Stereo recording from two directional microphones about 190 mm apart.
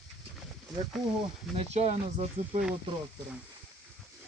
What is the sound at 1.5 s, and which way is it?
Speech, 35° right (ahead or behind).